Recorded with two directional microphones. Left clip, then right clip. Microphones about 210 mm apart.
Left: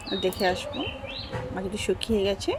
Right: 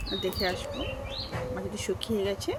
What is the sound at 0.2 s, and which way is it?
Speech, 25° left (ahead or behind).